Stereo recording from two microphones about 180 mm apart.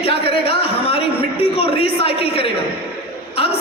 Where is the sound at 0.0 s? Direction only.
35° left (ahead or behind).